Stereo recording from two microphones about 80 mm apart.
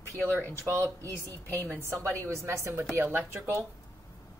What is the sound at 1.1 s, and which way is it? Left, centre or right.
Speech, left.